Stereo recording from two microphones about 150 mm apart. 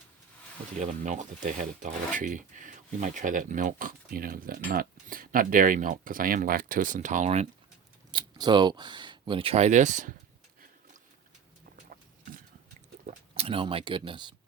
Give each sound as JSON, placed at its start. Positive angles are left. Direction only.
{"t": 0.8, "sound": "speech", "side_deg": -55}
{"t": 8.1, "sound": "speech", "side_deg": -30}
{"t": 11.9, "sound": "a sound", "side_deg": -65}
{"t": 13.3, "sound": "speech", "side_deg": -40}